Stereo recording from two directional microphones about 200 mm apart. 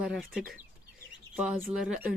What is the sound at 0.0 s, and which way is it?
Speech, centre (ahead or behind).